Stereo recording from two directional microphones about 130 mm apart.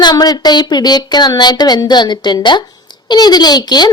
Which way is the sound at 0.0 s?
30° left (ahead or behind).